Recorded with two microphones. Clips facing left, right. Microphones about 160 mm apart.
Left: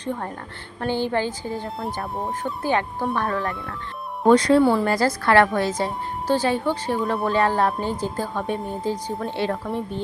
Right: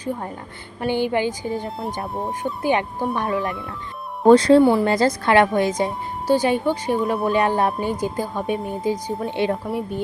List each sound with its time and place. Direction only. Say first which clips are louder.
0.0 s a woman's voice: right 1 dB; 10° right (ahead or behind)
4.3 s speech: right 4 dB; 30° right (ahead or behind)
4.6 s speech: right 3 dB; 15° right (ahead or behind)